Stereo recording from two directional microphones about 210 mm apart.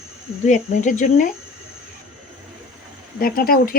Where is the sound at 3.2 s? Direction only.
45° left (ahead or behind).